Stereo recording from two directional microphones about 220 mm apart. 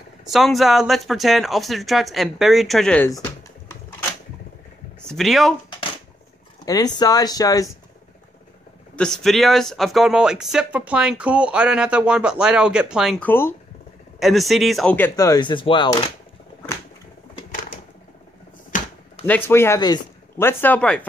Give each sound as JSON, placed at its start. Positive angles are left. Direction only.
{"t": 0.3, "sound": "speech", "side_deg": 0}
{"t": 5.0, "sound": "speech", "side_deg": 0}
{"t": 6.6, "sound": "speech", "side_deg": 15}
{"t": 8.9, "sound": "speech", "side_deg": 5}
{"t": 19.2, "sound": "speech", "side_deg": 10}